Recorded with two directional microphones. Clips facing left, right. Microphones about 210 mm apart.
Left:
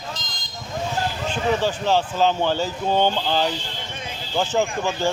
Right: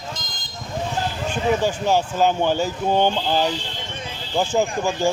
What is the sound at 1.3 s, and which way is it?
Speech, 10° right (ahead or behind).